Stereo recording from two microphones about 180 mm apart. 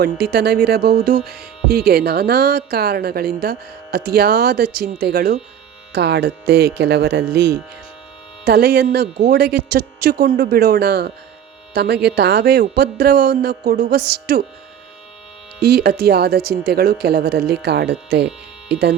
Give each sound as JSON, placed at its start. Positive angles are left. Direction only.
{"t": 0.0, "sound": "speech", "side_deg": -60}
{"t": 15.6, "sound": "speech", "side_deg": -60}